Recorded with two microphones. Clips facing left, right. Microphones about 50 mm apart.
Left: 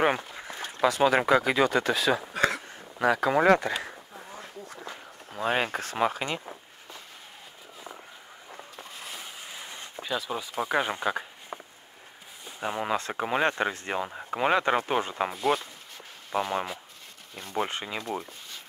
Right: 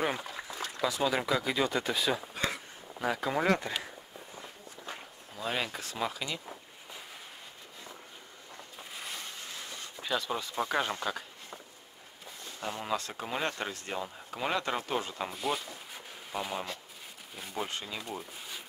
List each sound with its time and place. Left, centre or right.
0.0 s a sound: left
0.7 s speech: left
4.8 s speech: left
8.7 s a sound: centre; by 9.8 s left
10.0 s speech: centre
10.6 s speech: centre
11.5 s a sound: left
12.4 s speech: left
15.3 s speech: centre
16.3 s speech: left
17.6 s speech: left